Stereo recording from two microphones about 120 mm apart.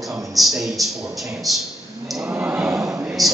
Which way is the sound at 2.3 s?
15° right (ahead or behind).